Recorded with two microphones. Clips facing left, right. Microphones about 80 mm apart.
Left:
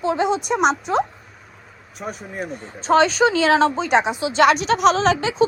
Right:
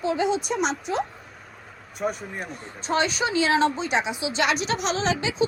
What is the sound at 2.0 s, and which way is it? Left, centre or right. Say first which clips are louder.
Speech: even; centre.